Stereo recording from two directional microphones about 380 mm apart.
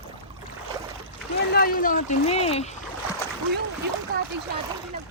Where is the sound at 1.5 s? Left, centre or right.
Left.